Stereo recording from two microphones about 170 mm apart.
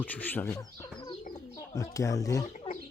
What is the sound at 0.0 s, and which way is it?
Speech, 10° left (ahead or behind).